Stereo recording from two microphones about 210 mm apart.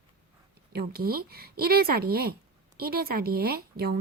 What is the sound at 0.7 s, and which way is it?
A woman's voice, 45° right (ahead or behind).